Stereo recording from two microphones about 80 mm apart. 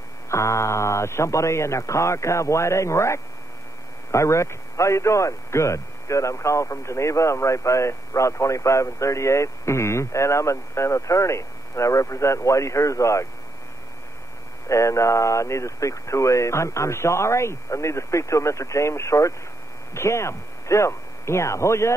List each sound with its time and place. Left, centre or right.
0.3 s a man's voice: left
14.7 s a man's voice: left